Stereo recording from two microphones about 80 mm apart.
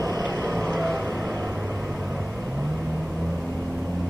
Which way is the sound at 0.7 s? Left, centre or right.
Right.